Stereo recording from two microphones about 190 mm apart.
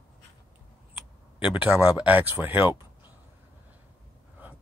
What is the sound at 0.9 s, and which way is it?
Speech, 5° right (ahead or behind).